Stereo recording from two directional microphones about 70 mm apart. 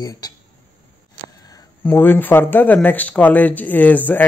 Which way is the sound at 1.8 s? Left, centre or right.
Left.